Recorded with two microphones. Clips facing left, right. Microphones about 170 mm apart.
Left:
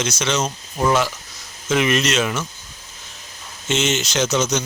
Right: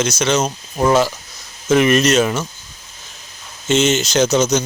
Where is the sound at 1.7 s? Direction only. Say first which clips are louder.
Right 6 dB; 45° right (ahead or behind).